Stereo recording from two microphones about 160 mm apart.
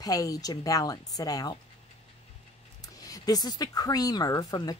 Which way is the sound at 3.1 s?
25° left (ahead or behind).